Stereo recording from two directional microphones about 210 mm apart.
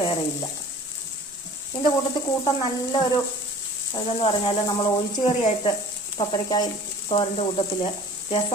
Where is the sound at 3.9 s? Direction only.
25° left (ahead or behind).